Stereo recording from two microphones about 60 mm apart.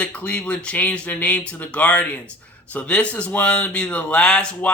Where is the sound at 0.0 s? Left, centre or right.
Left.